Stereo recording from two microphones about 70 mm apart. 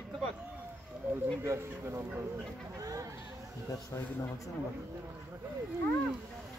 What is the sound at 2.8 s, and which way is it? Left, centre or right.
Speech, right.